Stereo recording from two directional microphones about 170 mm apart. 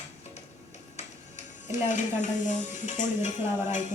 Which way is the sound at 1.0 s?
45° left (ahead or behind).